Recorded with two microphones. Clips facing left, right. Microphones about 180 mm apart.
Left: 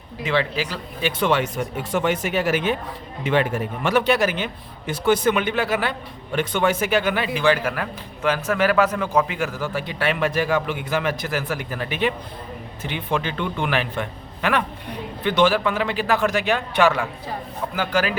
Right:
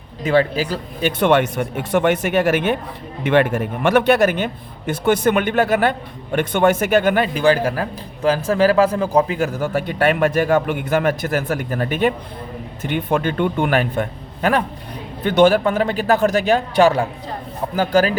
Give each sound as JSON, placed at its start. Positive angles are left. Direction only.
{"t": 0.2, "sound": "a man's voice", "side_deg": -40}
{"t": 1.2, "sound": "a man's voice", "side_deg": -60}
{"t": 7.3, "sound": "a man's voice", "side_deg": -35}